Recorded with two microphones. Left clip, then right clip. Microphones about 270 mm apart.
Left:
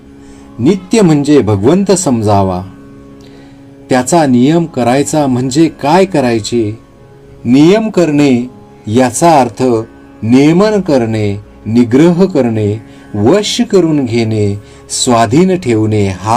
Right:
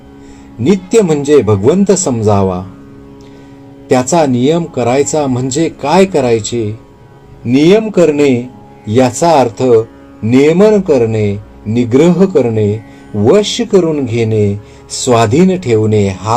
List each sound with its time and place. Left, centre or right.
0.6 s a man's voice: left
3.8 s a man's voice: left